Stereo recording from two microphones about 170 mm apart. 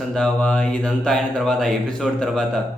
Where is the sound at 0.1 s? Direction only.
5° left (ahead or behind).